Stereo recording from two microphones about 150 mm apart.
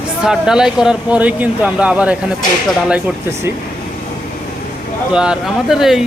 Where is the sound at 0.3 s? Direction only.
5° right (ahead or behind).